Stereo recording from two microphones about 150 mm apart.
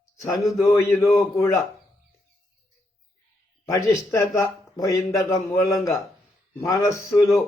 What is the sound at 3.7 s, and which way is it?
A man's voice, 20° left (ahead or behind).